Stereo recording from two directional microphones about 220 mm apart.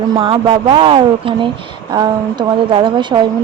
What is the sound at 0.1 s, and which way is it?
A woman's voice, 20° right (ahead or behind).